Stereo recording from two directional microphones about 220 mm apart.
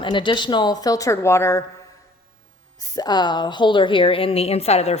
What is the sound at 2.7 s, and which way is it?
A woman's voice, 15° left (ahead or behind).